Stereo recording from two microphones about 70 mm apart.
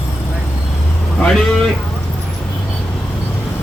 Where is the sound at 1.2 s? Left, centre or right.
Centre.